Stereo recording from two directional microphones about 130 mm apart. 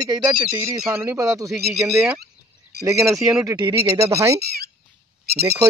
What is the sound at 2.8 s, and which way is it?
Speech, 25° right (ahead or behind).